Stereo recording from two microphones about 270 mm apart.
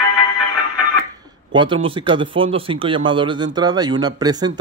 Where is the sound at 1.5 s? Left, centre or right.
Centre.